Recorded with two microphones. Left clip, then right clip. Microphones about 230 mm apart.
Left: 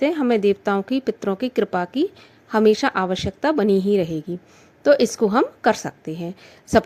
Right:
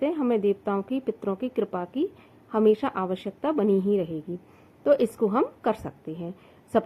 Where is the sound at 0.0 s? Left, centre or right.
Left.